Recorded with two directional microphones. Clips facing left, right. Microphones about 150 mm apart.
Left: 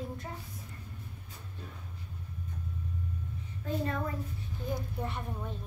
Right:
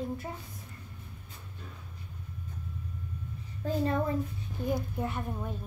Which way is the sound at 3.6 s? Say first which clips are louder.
Right 4 dB; 30° right (ahead or behind).